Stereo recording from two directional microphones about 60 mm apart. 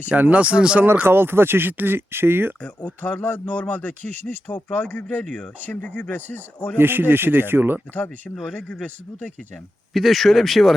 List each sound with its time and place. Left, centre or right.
0.1 s speech: right
1.0 s speech: right
2.8 s speech: left
6.7 s speech: right
8.5 s speech: left
9.9 s speech: centre